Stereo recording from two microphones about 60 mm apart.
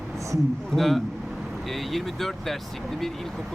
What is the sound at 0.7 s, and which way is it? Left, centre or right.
Speech, centre.